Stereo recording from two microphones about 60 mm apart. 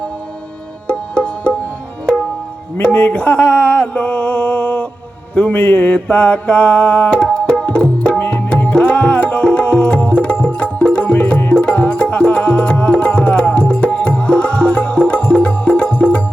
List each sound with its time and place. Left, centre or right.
0.9 s music: centre
2.8 s a sound: left
5.3 s mantra: left
8.2 s music: left